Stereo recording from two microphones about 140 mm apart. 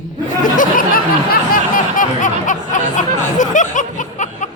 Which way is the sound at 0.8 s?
85° left.